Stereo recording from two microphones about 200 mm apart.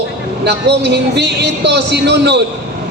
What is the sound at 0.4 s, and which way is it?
Speech, 55° right (ahead or behind).